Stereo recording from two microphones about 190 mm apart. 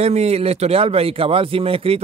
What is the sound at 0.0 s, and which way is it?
Speech, 35° right (ahead or behind).